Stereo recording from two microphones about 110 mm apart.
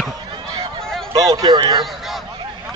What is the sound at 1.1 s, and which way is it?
Speech, 35° right (ahead or behind).